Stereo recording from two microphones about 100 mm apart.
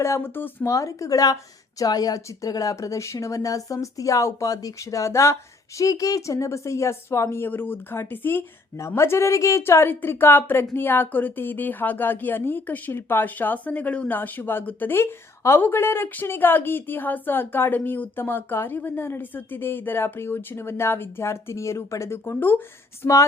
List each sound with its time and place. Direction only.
0.0 s speech: 25° left (ahead or behind)